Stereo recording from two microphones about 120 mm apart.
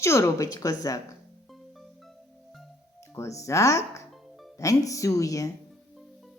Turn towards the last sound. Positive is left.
turn(degrees=30)  # may be behind; listen again after turning